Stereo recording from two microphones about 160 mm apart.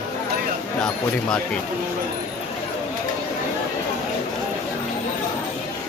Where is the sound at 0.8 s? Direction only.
5° left (ahead or behind).